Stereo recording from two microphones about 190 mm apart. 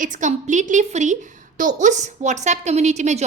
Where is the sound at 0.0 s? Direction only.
40° right (ahead or behind).